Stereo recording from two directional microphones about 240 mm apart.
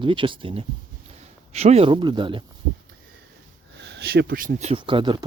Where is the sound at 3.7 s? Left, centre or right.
Right; by 5.2 s centre.